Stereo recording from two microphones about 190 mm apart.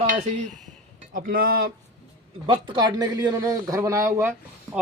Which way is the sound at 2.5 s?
25° right (ahead or behind).